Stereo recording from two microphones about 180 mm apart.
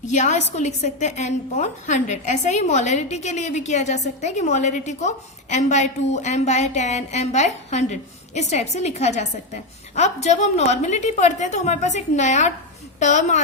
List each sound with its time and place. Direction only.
0.1 s a woman's voice: 40° left (ahead or behind)